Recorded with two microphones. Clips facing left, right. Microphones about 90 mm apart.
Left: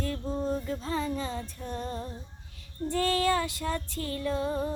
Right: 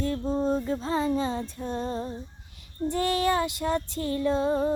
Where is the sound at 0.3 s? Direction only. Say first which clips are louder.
Right 5 dB; 25° right (ahead or behind).